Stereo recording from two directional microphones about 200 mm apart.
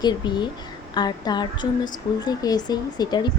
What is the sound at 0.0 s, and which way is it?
A woman's voice, 20° left (ahead or behind).